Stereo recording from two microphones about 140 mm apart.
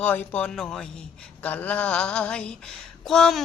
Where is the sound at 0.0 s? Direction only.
15° left (ahead or behind).